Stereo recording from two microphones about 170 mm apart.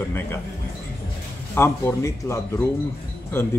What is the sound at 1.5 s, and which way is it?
Speech, 15° left (ahead or behind).